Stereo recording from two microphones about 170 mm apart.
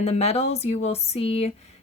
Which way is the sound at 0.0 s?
40° left (ahead or behind).